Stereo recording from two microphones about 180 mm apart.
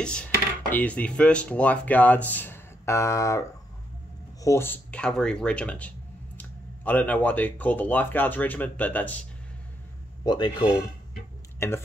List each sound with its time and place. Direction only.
0.0 s dishes: 5° left (ahead or behind)
0.7 s speech: 10° left (ahead or behind)
10.2 s a man's voice: 25° left (ahead or behind)